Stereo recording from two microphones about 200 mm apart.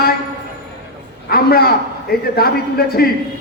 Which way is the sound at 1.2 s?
50° left (ahead or behind).